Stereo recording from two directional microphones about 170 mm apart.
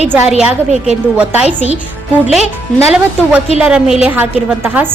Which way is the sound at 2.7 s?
5° right (ahead or behind).